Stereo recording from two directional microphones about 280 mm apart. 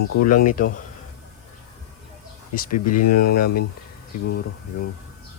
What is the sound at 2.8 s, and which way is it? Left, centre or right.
Speech, left.